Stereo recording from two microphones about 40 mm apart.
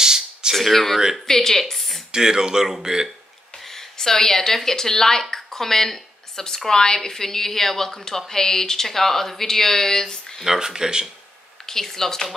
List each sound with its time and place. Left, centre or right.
0.0 s a sound: centre
0.6 s speech: centre
2.1 s speech: centre
3.7 s speech: centre
10.4 s speech: centre
11.6 s speech: centre